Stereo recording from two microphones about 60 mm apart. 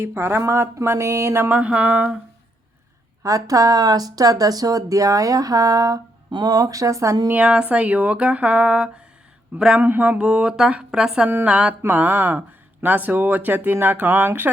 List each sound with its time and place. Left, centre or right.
0.0 s speech: right
1.5 s speech: right
3.2 s speech: right
7.4 s speech: centre
9.8 s speech: right
10.2 s speech: centre
11.9 s speech: right